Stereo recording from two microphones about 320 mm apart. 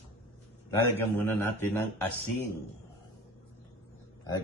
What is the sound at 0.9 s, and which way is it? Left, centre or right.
Speech, centre.